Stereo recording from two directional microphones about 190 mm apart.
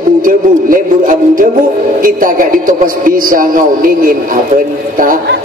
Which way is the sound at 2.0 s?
45° right (ahead or behind).